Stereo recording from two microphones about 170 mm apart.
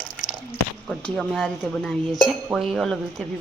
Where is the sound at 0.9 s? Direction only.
5° left (ahead or behind).